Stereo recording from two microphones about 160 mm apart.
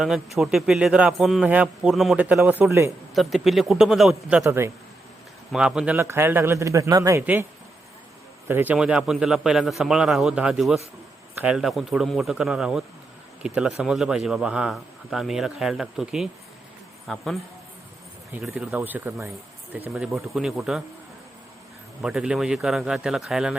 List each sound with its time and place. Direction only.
0.0 s a man's voice: centre (ahead or behind); by 2.9 s 15° right (ahead or behind)
3.2 s a man's voice: centre (ahead or behind)
4.4 s a man's voice: 15° right (ahead or behind)
5.5 s a man's voice: 5° right (ahead or behind)
8.4 s a man's voice: 10° right (ahead or behind)
22.0 s a man's voice: 5° right (ahead or behind)